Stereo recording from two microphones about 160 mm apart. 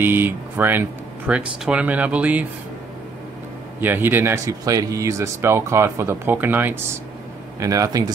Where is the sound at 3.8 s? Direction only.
15° right (ahead or behind).